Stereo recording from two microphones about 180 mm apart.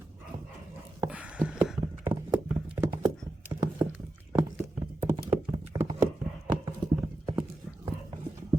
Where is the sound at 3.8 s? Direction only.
15° right (ahead or behind).